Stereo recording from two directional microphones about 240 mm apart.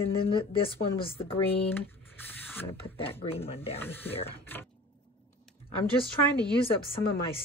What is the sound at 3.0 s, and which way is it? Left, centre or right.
Speech, left.